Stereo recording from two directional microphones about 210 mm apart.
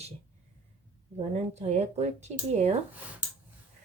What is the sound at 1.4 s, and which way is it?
A woman's voice, 30° right (ahead or behind).